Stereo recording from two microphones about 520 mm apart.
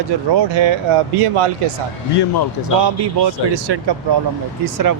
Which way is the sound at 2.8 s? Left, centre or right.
Right.